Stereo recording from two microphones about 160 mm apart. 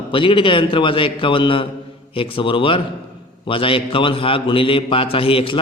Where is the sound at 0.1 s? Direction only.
30° left (ahead or behind).